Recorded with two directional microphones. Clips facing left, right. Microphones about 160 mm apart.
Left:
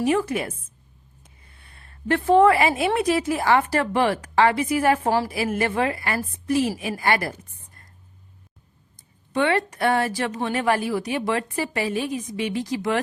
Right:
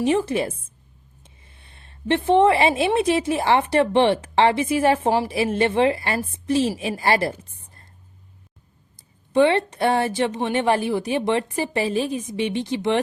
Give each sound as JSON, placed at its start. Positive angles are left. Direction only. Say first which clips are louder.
{"t": 0.0, "sound": "a woman's voice", "louder": "right 2 dB", "side_deg": -25}
{"t": 9.3, "sound": "a woman's voice", "louder": "right 4 dB", "side_deg": -25}